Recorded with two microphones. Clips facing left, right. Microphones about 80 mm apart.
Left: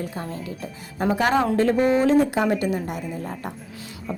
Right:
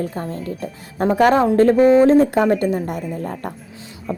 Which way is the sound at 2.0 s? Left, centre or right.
Right.